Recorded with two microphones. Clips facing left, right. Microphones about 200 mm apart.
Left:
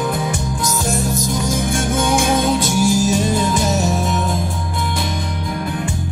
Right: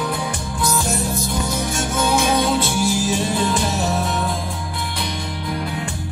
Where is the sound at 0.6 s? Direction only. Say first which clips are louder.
Right 1 dB; 45° left (ahead or behind).